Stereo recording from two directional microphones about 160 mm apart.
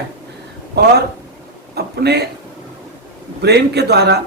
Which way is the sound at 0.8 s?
90° right.